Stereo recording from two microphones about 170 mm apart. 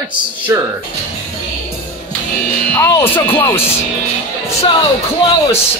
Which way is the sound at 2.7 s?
15° left (ahead or behind).